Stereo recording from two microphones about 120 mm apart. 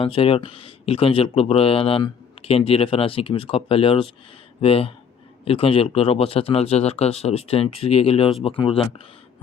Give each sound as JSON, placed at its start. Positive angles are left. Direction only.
{"t": 0.0, "sound": "speech", "side_deg": 50}